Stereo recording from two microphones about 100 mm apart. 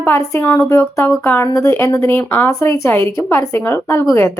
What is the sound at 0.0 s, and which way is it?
Speech, 25° left (ahead or behind).